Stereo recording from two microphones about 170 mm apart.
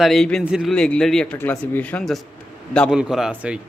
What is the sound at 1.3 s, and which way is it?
Speech, 15° left (ahead or behind).